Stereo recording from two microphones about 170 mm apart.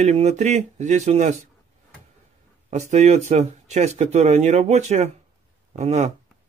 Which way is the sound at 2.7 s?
40° right (ahead or behind).